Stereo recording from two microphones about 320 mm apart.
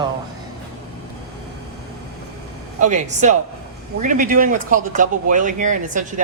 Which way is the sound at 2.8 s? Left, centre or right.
Right.